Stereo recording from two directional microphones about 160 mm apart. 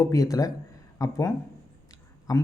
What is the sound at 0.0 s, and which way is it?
Speech, 20° left (ahead or behind).